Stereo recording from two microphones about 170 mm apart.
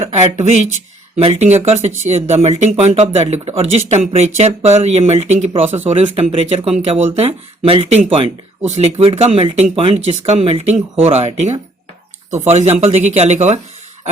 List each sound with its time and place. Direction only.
0.0 s speech: 40° right (ahead or behind)